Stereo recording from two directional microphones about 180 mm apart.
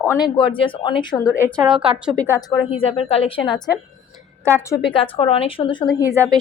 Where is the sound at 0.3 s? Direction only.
30° left (ahead or behind).